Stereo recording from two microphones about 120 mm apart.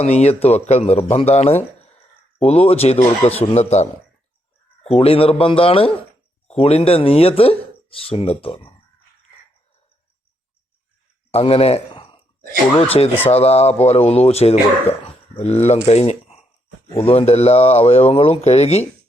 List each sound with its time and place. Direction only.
0.0 s speech: 60° left (ahead or behind)
4.9 s speech: 55° left (ahead or behind)
11.3 s a sound: 55° left (ahead or behind)
13.2 s speech: 60° left (ahead or behind)